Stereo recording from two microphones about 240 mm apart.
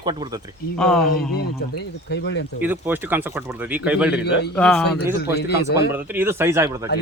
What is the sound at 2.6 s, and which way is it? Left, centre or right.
Speech, centre.